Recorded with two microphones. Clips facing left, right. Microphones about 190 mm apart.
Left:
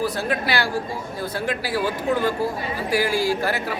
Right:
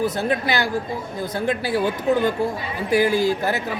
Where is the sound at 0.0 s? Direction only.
20° right (ahead or behind).